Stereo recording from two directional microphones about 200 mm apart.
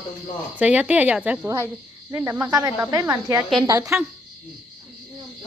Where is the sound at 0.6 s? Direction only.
5° right (ahead or behind).